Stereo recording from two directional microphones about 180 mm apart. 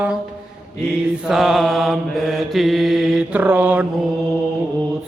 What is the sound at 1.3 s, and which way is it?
Mantra, centre (ahead or behind).